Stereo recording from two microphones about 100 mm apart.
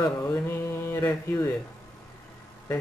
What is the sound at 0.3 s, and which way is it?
Speech, 25° left (ahead or behind).